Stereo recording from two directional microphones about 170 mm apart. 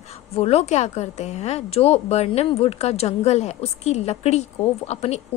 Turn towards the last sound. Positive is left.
turn(degrees=40)  # may be behind; listen again after turning